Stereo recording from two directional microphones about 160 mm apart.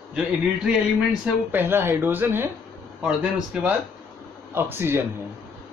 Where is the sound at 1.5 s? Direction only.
15° right (ahead or behind).